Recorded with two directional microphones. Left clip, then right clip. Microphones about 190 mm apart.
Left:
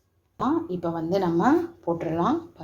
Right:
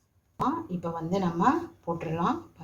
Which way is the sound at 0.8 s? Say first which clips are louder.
Left 5 dB; 40° left (ahead or behind).